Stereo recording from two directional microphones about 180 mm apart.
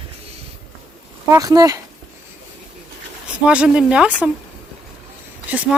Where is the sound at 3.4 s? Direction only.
5° right (ahead or behind).